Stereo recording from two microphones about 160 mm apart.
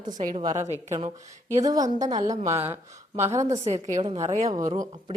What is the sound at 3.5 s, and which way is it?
Speech, 40° right (ahead or behind).